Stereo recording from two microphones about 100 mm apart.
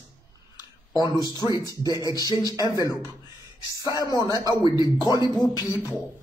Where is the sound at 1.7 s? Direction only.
40° left (ahead or behind).